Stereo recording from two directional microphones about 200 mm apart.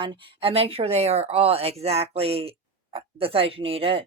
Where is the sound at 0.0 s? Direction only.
25° right (ahead or behind).